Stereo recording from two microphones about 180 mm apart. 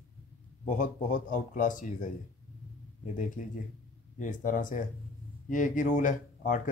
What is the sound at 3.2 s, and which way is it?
Speech, 45° left (ahead or behind).